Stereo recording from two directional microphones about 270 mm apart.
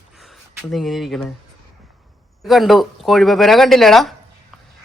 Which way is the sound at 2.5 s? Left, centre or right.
Centre.